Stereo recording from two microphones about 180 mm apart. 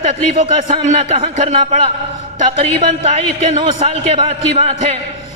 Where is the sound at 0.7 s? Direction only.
35° right (ahead or behind).